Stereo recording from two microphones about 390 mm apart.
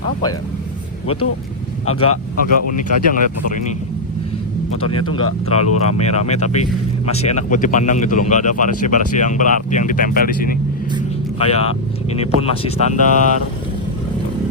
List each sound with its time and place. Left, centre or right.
1.0 s speech: left
2.4 s speech: left
4.9 s speech: left
6.1 s speech: centre